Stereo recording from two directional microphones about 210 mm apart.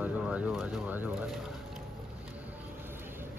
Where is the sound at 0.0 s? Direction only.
5° right (ahead or behind).